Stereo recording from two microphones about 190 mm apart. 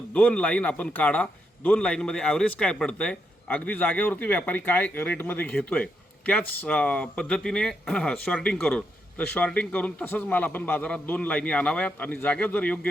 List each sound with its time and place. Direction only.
0.1 s a man's voice: 5° left (ahead or behind)